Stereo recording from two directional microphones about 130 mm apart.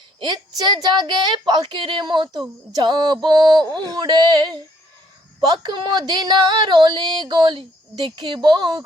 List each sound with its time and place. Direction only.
0.2 s a woman's voice: 35° right (ahead or behind)
5.6 s a woman's voice: 35° right (ahead or behind)